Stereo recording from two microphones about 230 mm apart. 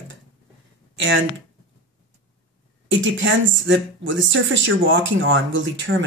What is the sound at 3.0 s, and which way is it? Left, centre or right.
Speech, right.